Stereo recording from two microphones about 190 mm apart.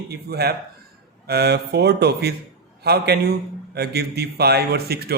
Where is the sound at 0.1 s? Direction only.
55° right (ahead or behind).